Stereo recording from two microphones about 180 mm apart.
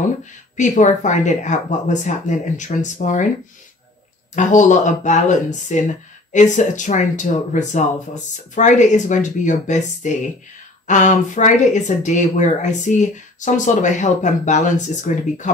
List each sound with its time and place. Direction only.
0.2 s speech: 45° left (ahead or behind)
4.4 s speech: 45° left (ahead or behind)